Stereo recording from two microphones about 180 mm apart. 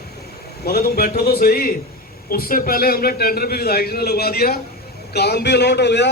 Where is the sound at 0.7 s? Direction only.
60° left (ahead or behind).